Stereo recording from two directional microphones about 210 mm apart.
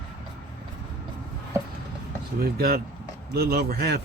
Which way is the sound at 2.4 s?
45° right (ahead or behind).